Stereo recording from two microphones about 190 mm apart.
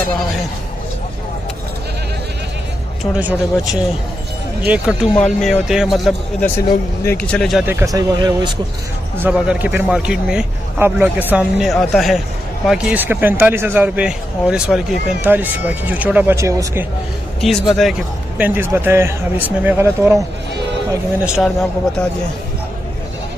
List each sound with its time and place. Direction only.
3.2 s speech: 5° right (ahead or behind)
7.6 s speech: 15° right (ahead or behind)
9.1 s speech: 10° right (ahead or behind)
17.4 s a man's voice: centre (ahead or behind)
18.4 s speech: 10° right (ahead or behind)
21.3 s speech: centre (ahead or behind)